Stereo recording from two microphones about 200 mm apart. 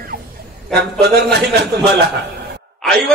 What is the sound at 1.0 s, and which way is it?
Speech, 55° right (ahead or behind).